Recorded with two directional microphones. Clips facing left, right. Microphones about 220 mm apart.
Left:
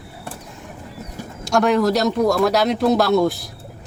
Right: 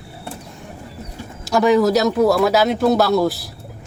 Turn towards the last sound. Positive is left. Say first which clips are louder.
# even
turn(degrees=0)  # may be behind; listen again after turning